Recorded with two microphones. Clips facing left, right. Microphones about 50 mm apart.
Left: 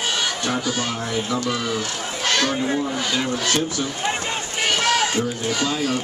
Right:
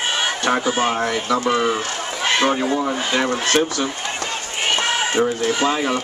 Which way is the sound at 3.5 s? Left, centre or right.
Right.